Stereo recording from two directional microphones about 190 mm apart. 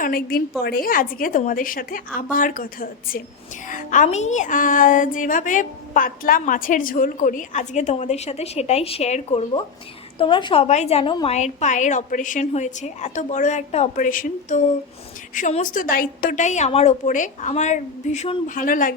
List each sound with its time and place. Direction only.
0.0 s a woman's voice: 50° left (ahead or behind)